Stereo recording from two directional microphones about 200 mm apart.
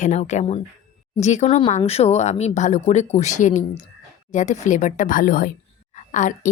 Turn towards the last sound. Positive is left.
turn(degrees=40)  # may be behind; listen again after turning